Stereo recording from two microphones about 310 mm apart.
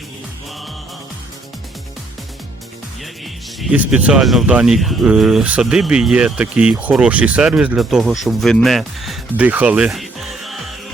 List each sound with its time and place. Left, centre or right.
3.6 s speech: centre